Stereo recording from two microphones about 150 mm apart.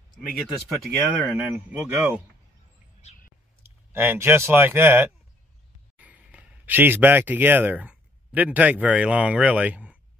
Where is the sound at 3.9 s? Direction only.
15° right (ahead or behind).